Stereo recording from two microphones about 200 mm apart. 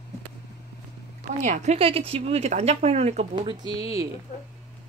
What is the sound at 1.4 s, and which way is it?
Speech, 35° right (ahead or behind).